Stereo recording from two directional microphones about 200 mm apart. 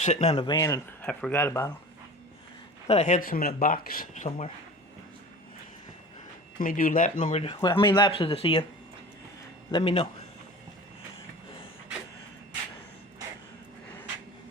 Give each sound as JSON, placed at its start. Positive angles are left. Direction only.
{"t": 0.0, "sound": "speech", "side_deg": 35}
{"t": 0.5, "sound": "speech", "side_deg": 15}
{"t": 2.8, "sound": "speech", "side_deg": 35}
{"t": 6.6, "sound": "speech", "side_deg": 45}
{"t": 7.5, "sound": "speech", "side_deg": 20}
{"t": 9.7, "sound": "speech", "side_deg": 25}